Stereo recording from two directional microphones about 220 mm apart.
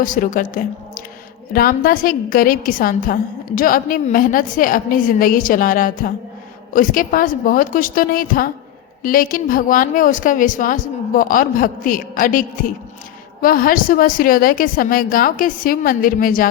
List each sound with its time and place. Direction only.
0.0 s a woman's voice: 35° left (ahead or behind)